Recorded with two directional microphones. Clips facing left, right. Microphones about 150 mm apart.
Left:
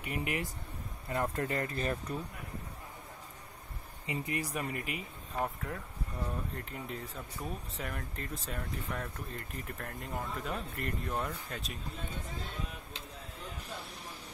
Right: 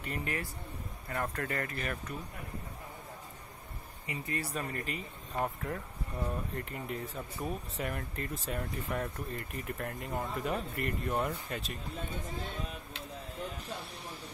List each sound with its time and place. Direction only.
0.0 s speech: 15° left (ahead or behind); by 2.1 s 30° left (ahead or behind)
4.0 s speech: 20° left (ahead or behind)
5.3 s speech: centre (ahead or behind)